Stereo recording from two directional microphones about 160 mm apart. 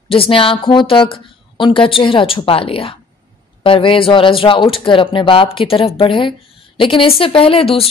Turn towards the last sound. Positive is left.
turn(degrees=35)  # may be behind; listen again after turning